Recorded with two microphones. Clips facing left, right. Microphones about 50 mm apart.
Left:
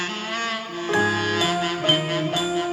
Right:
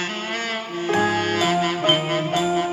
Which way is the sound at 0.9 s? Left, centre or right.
Right.